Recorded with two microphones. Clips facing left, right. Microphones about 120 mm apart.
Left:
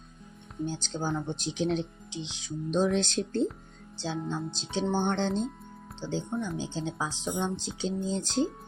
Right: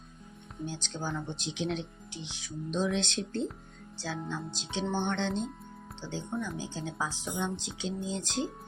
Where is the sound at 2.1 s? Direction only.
20° left (ahead or behind).